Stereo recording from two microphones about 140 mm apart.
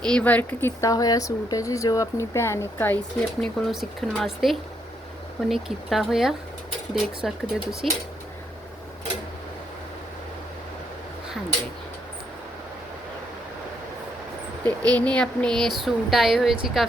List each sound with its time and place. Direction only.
0.0 s speech: 5° left (ahead or behind)
0.8 s speech: 25° left (ahead or behind)
3.4 s speech: centre (ahead or behind)
14.6 s speech: 10° left (ahead or behind)